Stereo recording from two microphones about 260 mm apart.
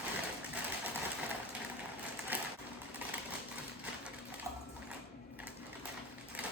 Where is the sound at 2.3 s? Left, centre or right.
Centre.